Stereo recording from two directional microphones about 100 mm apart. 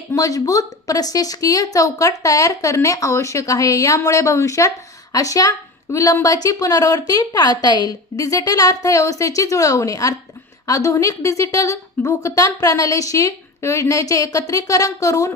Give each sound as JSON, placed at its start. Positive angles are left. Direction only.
{"t": 0.1, "sound": "a woman's voice", "side_deg": 35}